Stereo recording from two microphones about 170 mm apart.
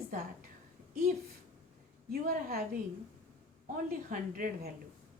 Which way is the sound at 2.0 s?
60° right (ahead or behind).